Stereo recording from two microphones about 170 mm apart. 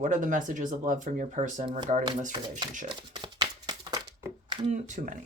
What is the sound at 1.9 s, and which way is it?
Speech, 35° right (ahead or behind).